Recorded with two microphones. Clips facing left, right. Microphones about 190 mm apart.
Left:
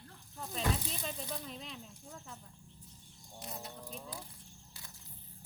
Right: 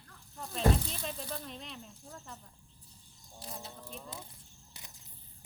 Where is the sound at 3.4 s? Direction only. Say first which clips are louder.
Even; 35° right (ahead or behind).